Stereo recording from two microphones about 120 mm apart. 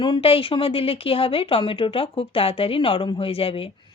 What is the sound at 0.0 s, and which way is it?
Speech, 45° left (ahead or behind).